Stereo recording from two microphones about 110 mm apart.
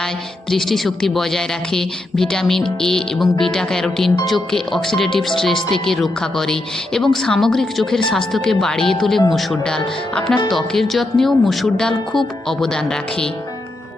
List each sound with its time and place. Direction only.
0.5 s speech: centre (ahead or behind)